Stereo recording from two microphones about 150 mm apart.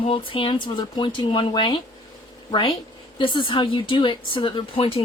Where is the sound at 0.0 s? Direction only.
35° left (ahead or behind).